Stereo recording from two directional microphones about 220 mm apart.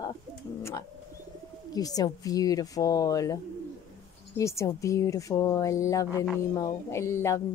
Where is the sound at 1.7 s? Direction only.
15° left (ahead or behind).